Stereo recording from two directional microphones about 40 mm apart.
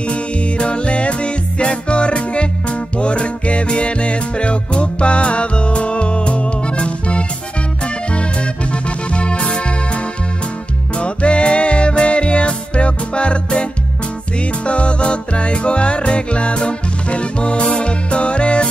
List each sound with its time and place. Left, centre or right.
0.1 s music: left